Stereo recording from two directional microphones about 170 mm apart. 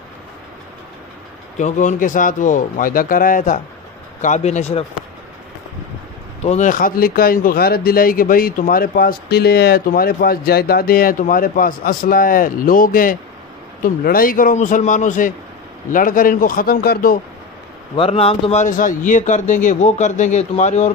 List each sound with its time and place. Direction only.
1.6 s speech: 45° left (ahead or behind)
6.4 s speech: 45° left (ahead or behind); by 17.2 s 60° left (ahead or behind)
17.9 s speech: 35° left (ahead or behind)